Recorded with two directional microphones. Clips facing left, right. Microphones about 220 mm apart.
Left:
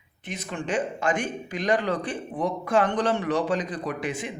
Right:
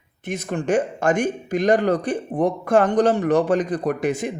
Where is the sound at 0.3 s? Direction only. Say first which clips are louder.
Right 8 dB; 45° right (ahead or behind).